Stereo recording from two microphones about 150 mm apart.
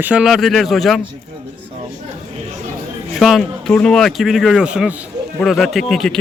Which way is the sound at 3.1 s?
Centre (ahead or behind).